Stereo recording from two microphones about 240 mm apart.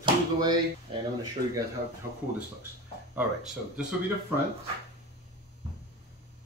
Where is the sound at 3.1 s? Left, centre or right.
Centre.